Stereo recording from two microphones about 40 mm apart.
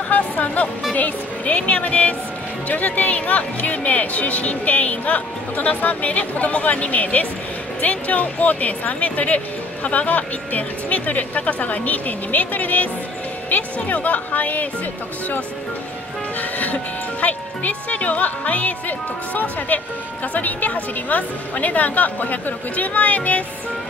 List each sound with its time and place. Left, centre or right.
0.1 s speech: left
16.3 s speech: left